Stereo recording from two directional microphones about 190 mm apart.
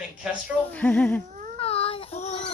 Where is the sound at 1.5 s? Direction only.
30° left (ahead or behind).